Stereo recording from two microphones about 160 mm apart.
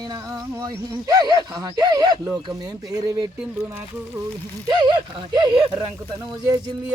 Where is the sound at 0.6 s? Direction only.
25° right (ahead or behind).